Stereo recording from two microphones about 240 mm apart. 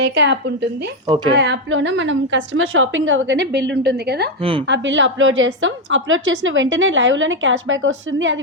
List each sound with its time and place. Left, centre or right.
0.0 s a woman's voice: right
1.0 s a woman's voice: right
1.4 s a woman's voice: right
4.4 s a woman's voice: right
4.6 s a woman's voice: right